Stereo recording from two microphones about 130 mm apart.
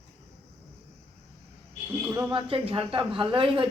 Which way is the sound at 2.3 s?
45° right (ahead or behind).